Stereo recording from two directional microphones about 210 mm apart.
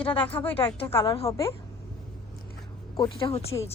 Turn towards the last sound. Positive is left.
turn(degrees=25)  # may be behind; listen again after turning